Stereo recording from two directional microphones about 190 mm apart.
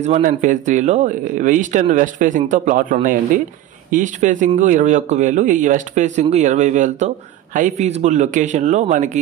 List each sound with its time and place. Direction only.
0.0 s speech: 40° right (ahead or behind)